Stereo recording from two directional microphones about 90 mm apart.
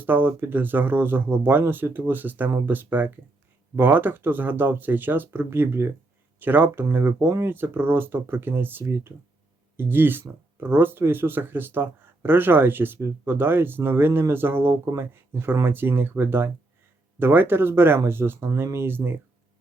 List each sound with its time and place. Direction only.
0.0 s speech: 20° right (ahead or behind)